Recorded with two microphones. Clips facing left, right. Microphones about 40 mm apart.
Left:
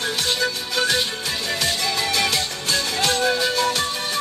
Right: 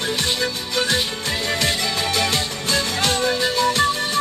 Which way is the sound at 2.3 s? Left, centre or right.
Right.